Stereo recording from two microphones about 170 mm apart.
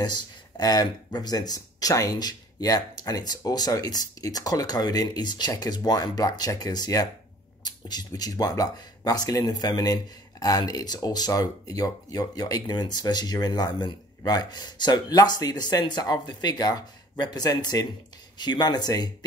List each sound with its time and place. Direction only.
0.0 s speech: 25° left (ahead or behind)